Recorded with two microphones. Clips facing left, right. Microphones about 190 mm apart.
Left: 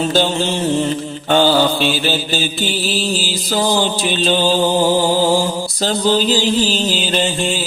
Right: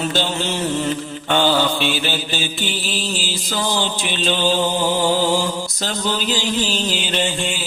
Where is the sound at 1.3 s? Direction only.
35° left (ahead or behind).